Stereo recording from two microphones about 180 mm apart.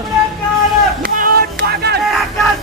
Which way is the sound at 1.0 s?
55° right (ahead or behind).